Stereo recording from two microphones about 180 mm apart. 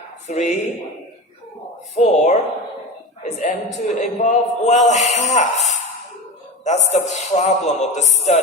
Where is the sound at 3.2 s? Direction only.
40° left (ahead or behind).